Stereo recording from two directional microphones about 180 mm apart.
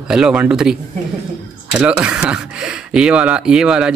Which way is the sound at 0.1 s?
5° right (ahead or behind).